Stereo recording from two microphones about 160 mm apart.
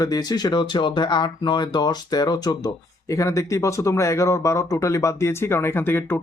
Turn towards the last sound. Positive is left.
turn(degrees=15)  # may be behind; listen again after turning